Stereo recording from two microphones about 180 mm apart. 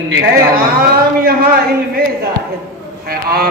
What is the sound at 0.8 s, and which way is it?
Speech, 55° right (ahead or behind).